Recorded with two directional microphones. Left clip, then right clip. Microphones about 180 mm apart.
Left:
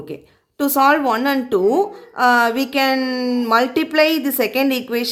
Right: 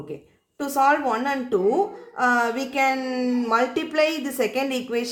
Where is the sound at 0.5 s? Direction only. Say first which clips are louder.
Left 5 dB; 40° left (ahead or behind).